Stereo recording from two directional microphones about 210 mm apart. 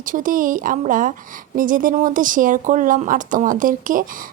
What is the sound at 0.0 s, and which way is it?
Speech, 40° right (ahead or behind).